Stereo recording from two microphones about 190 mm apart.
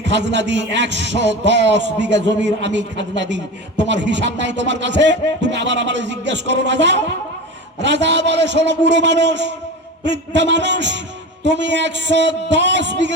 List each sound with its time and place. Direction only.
0.0 s a man's voice: 65° right (ahead or behind)